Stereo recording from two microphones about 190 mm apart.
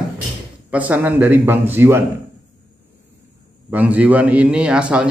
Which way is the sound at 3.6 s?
10° right (ahead or behind).